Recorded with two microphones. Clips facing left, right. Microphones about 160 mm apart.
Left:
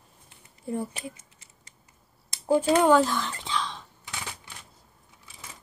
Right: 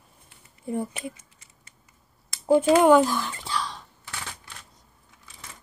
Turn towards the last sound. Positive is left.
turn(degrees=15)  # may be behind; listen again after turning